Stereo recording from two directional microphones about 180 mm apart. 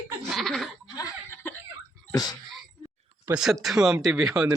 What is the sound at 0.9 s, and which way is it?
Chuckle, 15° left (ahead or behind).